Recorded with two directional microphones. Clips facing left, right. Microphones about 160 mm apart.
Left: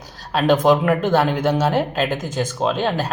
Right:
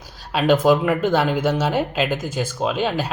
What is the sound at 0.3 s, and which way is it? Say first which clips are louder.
Speech: left 1 dB; 10° right (ahead or behind).